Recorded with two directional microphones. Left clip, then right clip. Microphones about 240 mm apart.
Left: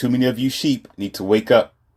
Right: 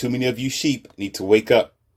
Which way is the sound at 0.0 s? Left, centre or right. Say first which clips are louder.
Left 3 dB; left.